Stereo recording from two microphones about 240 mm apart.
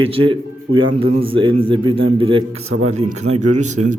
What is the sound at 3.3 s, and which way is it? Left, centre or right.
Speech, right.